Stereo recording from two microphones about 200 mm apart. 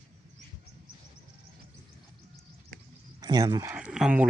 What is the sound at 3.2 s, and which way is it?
Speech, 20° right (ahead or behind).